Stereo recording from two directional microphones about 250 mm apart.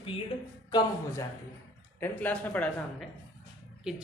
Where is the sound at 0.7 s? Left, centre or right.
Centre.